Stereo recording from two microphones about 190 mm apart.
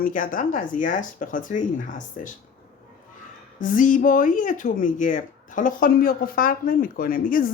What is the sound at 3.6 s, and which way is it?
A woman's voice, 45° left (ahead or behind).